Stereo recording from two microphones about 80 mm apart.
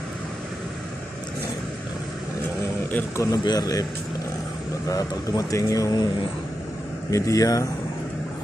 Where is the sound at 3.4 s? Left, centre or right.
Left.